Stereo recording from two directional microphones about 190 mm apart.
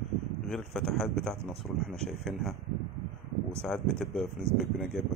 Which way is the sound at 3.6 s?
5° left (ahead or behind).